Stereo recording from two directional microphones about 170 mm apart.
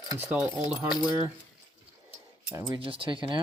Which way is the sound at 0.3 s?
10° right (ahead or behind).